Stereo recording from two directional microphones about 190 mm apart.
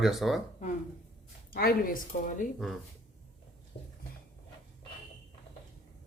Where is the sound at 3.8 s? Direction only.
60° left (ahead or behind).